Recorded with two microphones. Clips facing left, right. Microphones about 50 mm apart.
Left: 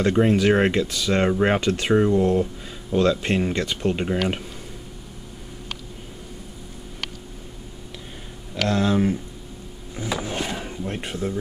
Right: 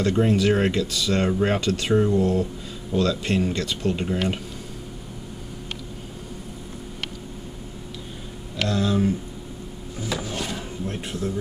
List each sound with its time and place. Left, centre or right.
0.0 s speech: centre
8.6 s speech: left
10.2 s a sound: left